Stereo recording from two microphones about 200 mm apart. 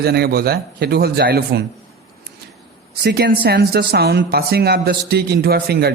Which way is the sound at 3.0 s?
55° right (ahead or behind).